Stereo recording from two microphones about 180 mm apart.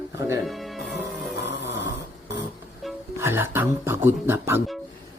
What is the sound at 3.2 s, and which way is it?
Speech, 10° right (ahead or behind).